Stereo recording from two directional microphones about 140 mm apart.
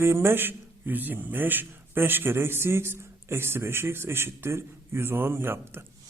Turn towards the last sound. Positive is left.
turn(degrees=-15)  # may be behind; listen again after turning